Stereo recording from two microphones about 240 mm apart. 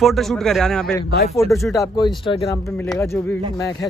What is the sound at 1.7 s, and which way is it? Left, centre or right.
Speech, centre.